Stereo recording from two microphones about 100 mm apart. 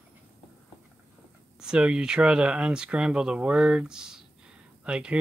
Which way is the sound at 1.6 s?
10° right (ahead or behind).